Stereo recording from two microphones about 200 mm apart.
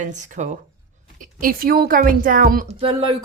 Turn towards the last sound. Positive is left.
turn(degrees=-25)  # may be behind; listen again after turning